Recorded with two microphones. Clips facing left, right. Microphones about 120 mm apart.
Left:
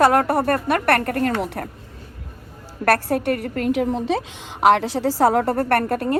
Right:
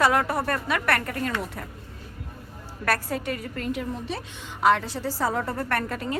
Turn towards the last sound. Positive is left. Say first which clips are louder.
# left 8 dB
turn(degrees=55)  # may be behind; listen again after turning